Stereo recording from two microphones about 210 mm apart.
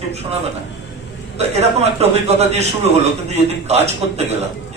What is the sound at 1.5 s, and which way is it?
A man's voice, 30° right (ahead or behind).